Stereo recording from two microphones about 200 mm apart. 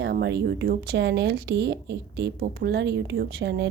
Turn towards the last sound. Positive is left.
turn(degrees=-60)  # may be behind; listen again after turning